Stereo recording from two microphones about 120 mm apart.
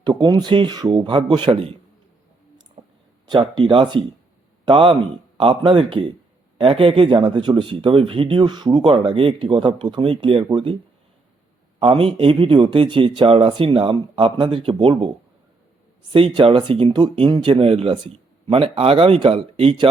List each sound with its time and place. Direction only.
0.0 s speech: 35° right (ahead or behind)
2.8 s a sound: 75° right (ahead or behind)
3.2 s speech: 40° right (ahead or behind)
11.8 s speech: 50° right (ahead or behind)
16.1 s speech: 50° right (ahead or behind)